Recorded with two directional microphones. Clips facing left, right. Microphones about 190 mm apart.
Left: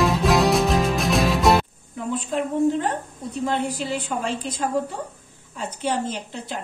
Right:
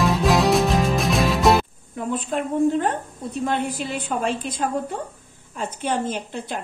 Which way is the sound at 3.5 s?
55° right (ahead or behind).